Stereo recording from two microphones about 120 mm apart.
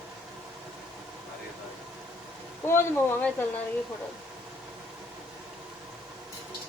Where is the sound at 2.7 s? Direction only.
20° left (ahead or behind).